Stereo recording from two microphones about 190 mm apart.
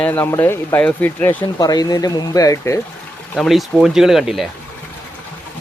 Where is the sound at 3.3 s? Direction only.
Centre (ahead or behind).